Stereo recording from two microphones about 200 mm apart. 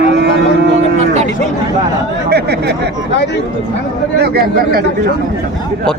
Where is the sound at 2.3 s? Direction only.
55° right (ahead or behind).